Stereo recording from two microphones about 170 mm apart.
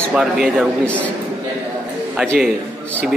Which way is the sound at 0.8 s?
10° left (ahead or behind).